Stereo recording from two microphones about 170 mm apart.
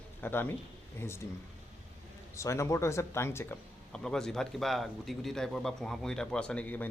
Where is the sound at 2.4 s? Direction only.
15° left (ahead or behind).